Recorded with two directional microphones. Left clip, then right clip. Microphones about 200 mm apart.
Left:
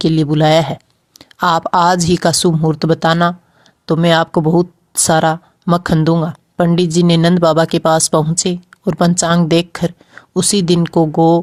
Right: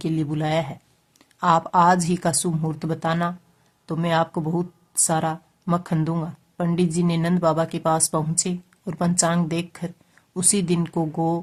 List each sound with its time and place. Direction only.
0.0 s a woman's voice: 30° left (ahead or behind)